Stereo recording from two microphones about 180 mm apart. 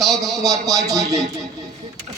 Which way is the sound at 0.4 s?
20° right (ahead or behind).